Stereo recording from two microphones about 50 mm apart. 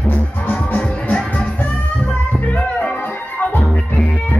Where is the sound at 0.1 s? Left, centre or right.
Left.